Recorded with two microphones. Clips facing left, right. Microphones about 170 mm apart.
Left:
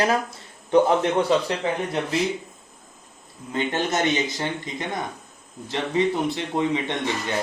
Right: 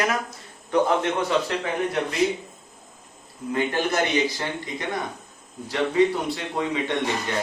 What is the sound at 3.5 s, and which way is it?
Speech, 25° left (ahead or behind).